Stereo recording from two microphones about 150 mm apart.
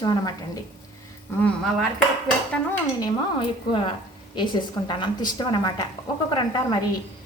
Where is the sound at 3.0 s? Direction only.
35° left (ahead or behind).